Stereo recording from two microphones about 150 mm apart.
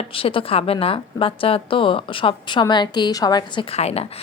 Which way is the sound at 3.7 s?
45° left (ahead or behind).